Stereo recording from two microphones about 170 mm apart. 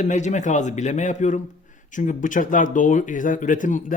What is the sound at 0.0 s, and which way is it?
Speech, 45° left (ahead or behind).